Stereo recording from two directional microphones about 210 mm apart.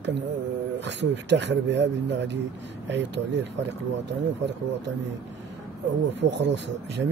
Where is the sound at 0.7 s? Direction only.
55° right (ahead or behind).